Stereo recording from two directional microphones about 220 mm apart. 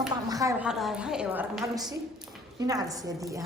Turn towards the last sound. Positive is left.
turn(degrees=-15)  # may be behind; listen again after turning